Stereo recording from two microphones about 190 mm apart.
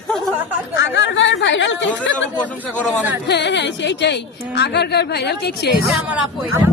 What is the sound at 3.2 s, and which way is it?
A woman's voice, 65° left (ahead or behind).